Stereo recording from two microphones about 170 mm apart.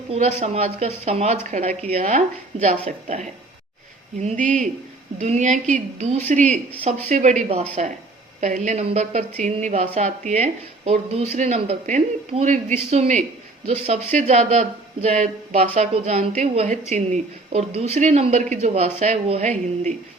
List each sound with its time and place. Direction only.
0.1 s speech: 40° right (ahead or behind)